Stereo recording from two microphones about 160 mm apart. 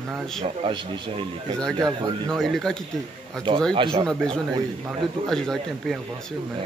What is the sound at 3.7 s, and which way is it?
Speech, 35° right (ahead or behind).